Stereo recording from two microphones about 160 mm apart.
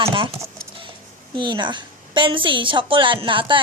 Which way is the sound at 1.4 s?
30° right (ahead or behind).